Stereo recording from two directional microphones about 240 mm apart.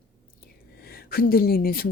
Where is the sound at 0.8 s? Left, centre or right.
Left.